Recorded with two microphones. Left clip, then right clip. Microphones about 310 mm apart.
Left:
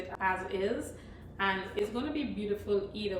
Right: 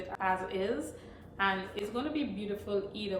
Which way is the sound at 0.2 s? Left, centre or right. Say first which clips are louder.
Left 1 dB; centre.